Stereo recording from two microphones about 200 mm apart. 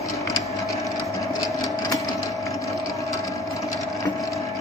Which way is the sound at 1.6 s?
20° left (ahead or behind).